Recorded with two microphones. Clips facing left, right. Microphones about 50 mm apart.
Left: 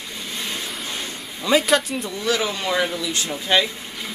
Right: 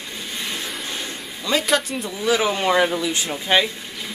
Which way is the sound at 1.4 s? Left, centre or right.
Centre.